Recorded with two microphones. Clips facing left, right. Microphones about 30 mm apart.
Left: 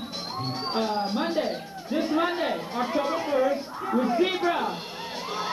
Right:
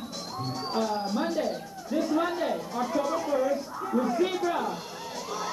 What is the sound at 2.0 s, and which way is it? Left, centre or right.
Speech, left.